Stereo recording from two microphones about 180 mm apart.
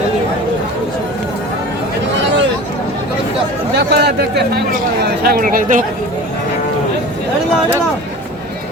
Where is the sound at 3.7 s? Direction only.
65° right (ahead or behind); by 5.8 s 50° right (ahead or behind).